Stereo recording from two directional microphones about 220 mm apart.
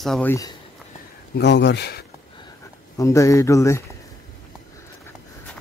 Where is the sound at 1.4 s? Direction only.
50° left (ahead or behind).